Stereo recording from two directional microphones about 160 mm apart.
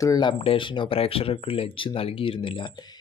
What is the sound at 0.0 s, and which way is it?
Speech, 25° left (ahead or behind).